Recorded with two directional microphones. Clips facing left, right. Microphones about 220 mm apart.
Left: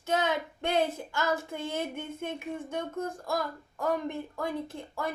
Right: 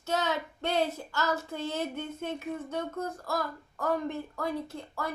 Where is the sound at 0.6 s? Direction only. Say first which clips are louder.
Left 1 dB; 50° left (ahead or behind).